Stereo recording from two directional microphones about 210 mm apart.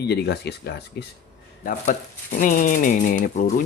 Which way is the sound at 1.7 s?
35° left (ahead or behind).